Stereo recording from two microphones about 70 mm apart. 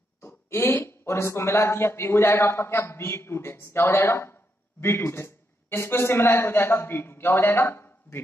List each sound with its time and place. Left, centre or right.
0.2 s speech: left